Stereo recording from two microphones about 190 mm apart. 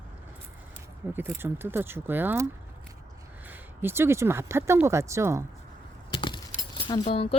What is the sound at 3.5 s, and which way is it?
Speech, 10° right (ahead or behind).